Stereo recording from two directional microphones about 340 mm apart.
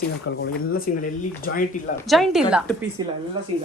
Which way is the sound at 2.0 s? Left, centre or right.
Centre.